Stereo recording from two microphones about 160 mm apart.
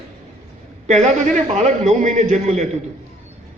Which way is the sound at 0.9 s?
45° right (ahead or behind).